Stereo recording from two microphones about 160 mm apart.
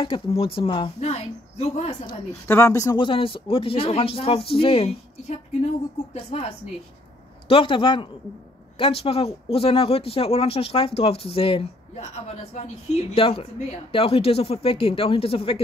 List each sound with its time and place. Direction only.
0.0 s speech: 35° left (ahead or behind)
2.4 s speech: 15° left (ahead or behind); by 4.9 s 35° left (ahead or behind)
6.1 s speech: 40° left (ahead or behind)